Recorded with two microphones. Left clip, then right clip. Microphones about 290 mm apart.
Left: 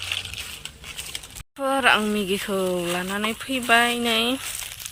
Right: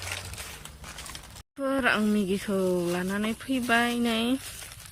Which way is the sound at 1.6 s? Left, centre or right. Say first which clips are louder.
Left 6 dB; centre.